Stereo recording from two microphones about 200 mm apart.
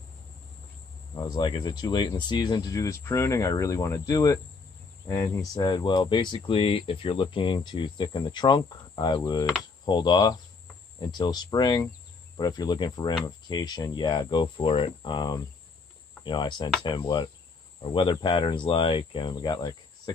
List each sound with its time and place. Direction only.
1.1 s speech: 20° left (ahead or behind)
5.0 s cricket: 15° left (ahead or behind)
5.5 s speech: 20° left (ahead or behind)